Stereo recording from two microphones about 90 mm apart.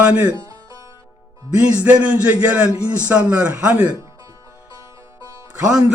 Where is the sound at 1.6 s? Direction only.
15° right (ahead or behind).